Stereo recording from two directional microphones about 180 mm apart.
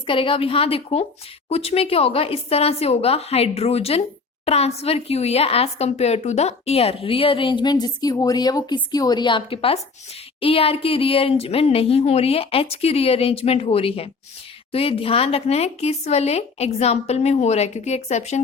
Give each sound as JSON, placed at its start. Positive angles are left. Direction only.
{"t": 0.0, "sound": "a woman's voice", "side_deg": 30}